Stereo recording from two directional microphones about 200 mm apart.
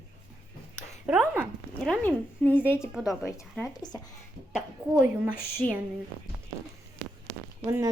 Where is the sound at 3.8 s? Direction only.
20° left (ahead or behind).